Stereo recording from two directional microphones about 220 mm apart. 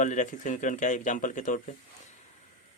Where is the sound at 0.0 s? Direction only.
35° left (ahead or behind).